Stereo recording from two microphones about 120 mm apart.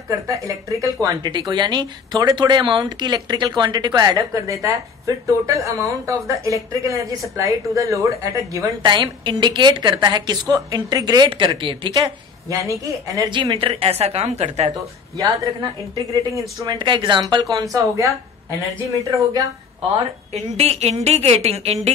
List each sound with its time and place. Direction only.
0.3 s speech: 25° right (ahead or behind)
8.8 s a woman's voice: 40° right (ahead or behind)
12.0 s speech: 25° right (ahead or behind)
13.3 s a woman's voice: 40° right (ahead or behind); by 14.7 s 65° right (ahead or behind)
15.1 s speech: 30° right (ahead or behind)
16.7 s a woman's voice: 40° right (ahead or behind); by 19.4 s 25° right (ahead or behind)
20.5 s a woman's voice: 60° right (ahead or behind)